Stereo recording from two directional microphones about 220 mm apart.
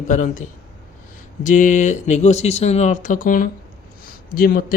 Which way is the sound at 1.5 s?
35° left (ahead or behind).